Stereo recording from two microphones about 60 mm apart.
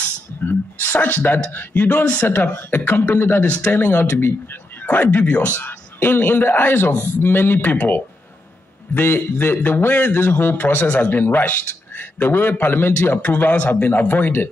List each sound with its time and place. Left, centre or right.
0.0 s a sound: left
0.9 s a man's voice: left
3.4 s speech: left
3.7 s a man's voice: left
8.9 s a man's voice: left